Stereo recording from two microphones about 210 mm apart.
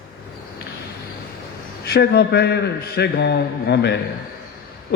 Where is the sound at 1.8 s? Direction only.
45° left (ahead or behind).